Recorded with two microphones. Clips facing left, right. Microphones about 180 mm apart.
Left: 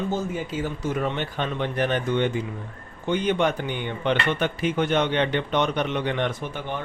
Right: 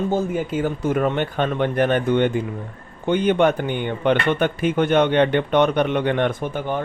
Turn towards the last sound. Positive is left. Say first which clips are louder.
# right 6 dB
turn(degrees=-45)  # may be behind; listen again after turning